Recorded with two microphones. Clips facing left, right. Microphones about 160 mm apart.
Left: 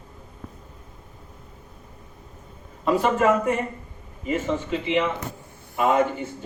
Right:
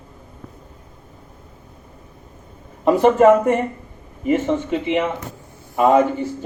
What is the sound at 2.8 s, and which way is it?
Speech, 50° right (ahead or behind).